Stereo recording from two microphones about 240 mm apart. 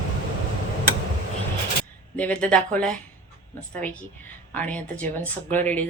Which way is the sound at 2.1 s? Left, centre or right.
Centre.